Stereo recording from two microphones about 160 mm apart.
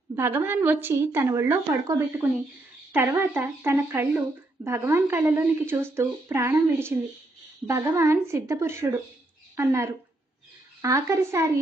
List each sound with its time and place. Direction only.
0.1 s a woman's voice: 15° right (ahead or behind)